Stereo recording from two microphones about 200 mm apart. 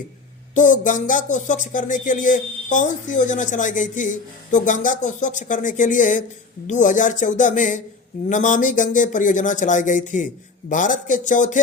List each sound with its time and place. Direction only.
0.5 s speech: 40° left (ahead or behind)